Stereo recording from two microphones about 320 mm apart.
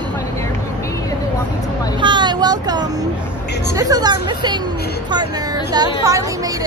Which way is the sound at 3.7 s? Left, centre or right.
Centre.